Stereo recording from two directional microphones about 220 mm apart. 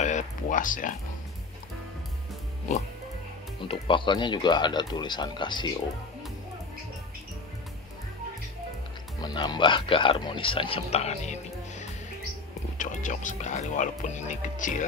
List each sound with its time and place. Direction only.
0.0 s a sound: 35° left (ahead or behind)
3.6 s speech: 25° left (ahead or behind)
9.2 s speech: 20° left (ahead or behind)
12.7 s speech: 35° left (ahead or behind)